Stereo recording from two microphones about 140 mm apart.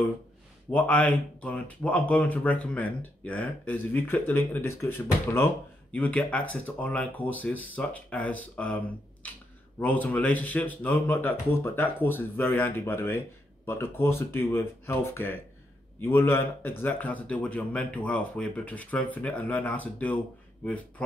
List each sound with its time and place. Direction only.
0.7 s speech: 10° left (ahead or behind)
9.8 s speech: 10° left (ahead or behind)